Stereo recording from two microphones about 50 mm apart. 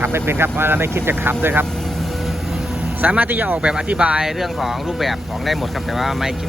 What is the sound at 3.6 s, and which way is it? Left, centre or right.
Speech, right.